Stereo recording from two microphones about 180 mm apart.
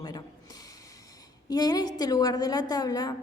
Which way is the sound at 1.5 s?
20° left (ahead or behind).